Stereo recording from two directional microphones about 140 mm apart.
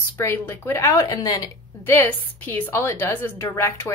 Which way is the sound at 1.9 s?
15° left (ahead or behind).